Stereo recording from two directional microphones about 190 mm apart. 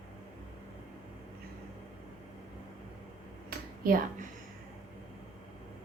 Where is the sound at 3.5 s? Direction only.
50° right (ahead or behind).